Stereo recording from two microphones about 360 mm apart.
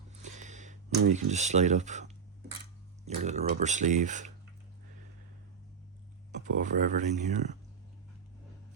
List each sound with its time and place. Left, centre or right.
0.2 s a sound: centre
3.2 s speech: centre
6.3 s speech: right